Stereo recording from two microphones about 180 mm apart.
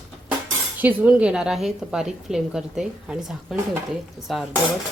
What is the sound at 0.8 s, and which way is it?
A woman's voice, 10° right (ahead or behind).